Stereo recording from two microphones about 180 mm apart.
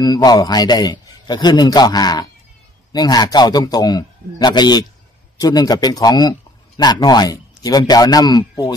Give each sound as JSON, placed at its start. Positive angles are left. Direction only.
{"t": 0.0, "sound": "a man's voice", "side_deg": 20}